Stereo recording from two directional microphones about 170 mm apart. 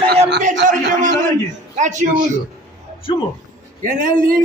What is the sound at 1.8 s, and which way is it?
Speech, 45° right (ahead or behind).